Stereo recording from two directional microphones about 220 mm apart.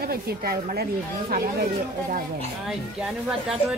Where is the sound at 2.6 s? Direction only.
Centre (ahead or behind).